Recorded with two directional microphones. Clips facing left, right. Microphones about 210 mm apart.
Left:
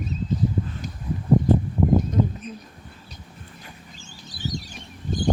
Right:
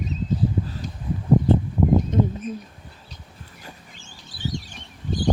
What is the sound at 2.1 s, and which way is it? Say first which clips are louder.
Bird: right 2 dB; 25° right (ahead or behind).